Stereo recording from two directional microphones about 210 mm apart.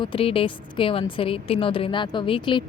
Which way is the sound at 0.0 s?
25° left (ahead or behind).